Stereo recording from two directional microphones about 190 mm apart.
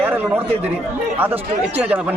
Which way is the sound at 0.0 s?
10° right (ahead or behind).